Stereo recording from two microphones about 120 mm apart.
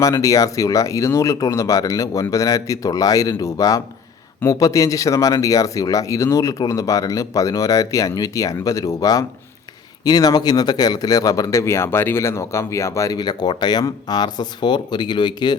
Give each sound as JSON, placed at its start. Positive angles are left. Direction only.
{"t": 0.0, "sound": "speech", "side_deg": 30}